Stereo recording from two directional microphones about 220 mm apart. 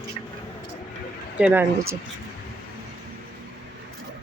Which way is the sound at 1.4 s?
5° right (ahead or behind).